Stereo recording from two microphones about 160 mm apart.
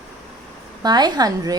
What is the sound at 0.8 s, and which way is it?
Speech, 25° right (ahead or behind).